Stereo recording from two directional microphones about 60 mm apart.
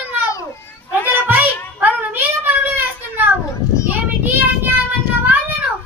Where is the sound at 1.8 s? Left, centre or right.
Right.